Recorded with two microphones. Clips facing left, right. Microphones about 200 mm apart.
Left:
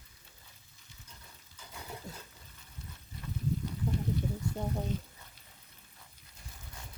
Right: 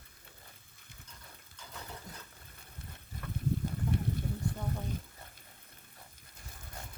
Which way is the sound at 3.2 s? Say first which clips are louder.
Even; 45° right (ahead or behind).